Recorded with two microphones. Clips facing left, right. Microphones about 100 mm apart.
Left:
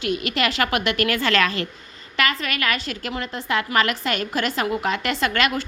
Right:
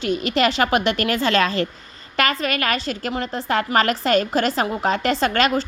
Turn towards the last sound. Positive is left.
turn(degrees=-35)  # may be behind; listen again after turning